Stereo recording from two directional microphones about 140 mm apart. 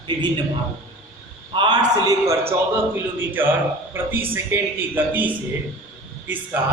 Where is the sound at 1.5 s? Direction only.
30° right (ahead or behind).